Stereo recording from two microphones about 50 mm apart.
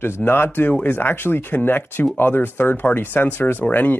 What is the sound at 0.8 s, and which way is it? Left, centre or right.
Speech, left.